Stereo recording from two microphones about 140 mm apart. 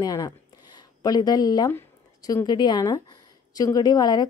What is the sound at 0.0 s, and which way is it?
A woman's voice, 25° left (ahead or behind).